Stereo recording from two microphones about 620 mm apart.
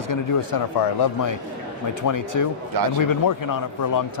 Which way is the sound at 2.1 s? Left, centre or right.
Left.